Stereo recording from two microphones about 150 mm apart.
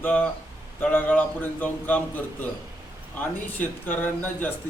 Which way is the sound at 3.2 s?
10° left (ahead or behind).